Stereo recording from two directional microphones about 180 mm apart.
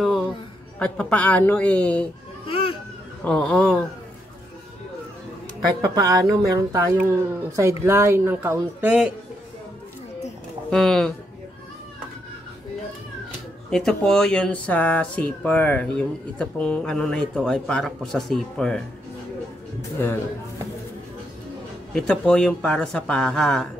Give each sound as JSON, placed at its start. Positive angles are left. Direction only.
{"t": 0.7, "sound": "a man's voice", "side_deg": 5}
{"t": 2.4, "sound": "a sound", "side_deg": 30}
{"t": 3.3, "sound": "a man's voice", "side_deg": 5}
{"t": 5.9, "sound": "speech", "side_deg": -20}
{"t": 10.7, "sound": "speech", "side_deg": 0}
{"t": 13.7, "sound": "speech", "side_deg": 5}
{"t": 21.9, "sound": "speech", "side_deg": 5}